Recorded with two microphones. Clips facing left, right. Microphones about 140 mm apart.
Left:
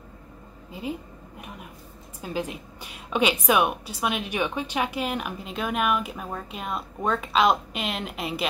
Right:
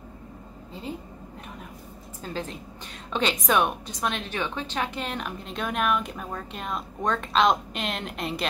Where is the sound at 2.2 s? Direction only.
10° left (ahead or behind).